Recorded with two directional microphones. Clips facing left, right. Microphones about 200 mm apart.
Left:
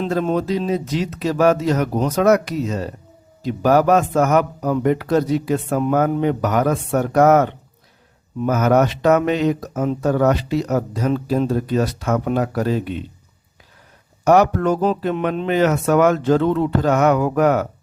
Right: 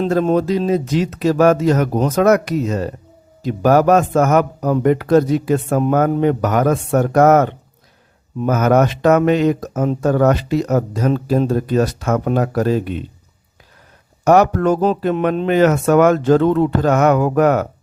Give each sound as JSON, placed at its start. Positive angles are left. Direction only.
{"t": 0.0, "sound": "speech", "side_deg": -45}
{"t": 14.3, "sound": "speech", "side_deg": -50}